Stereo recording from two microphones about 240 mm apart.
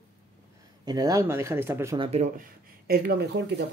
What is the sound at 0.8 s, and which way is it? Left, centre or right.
Speech, centre.